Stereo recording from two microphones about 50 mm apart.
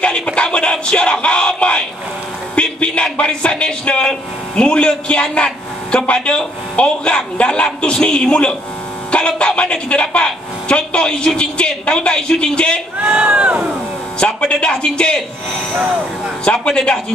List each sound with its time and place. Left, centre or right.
0.0 s a sound: left
9.6 s a woman's voice: left
13.0 s speech: right
14.2 s a woman's voice: left
16.4 s a woman's voice: centre